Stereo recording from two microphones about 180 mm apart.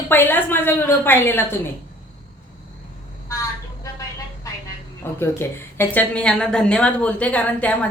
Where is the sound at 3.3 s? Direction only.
20° left (ahead or behind).